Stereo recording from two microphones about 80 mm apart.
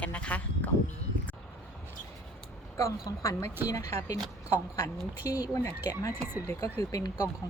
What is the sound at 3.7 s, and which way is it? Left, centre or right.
Speech, left.